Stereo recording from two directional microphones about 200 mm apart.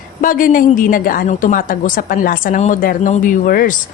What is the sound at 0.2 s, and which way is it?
A woman's voice, 45° left (ahead or behind).